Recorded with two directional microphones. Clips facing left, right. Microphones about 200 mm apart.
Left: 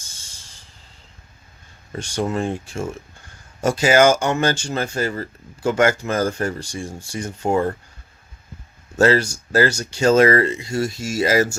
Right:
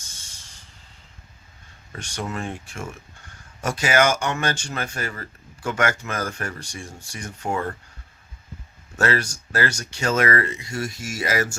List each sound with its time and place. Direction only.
1.9 s speech: 30° left (ahead or behind)
9.0 s speech: 30° left (ahead or behind)